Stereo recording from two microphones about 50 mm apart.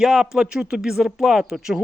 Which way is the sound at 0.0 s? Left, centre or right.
Centre.